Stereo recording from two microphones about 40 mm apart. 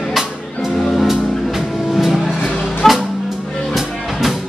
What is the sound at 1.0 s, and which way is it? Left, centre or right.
Music, centre.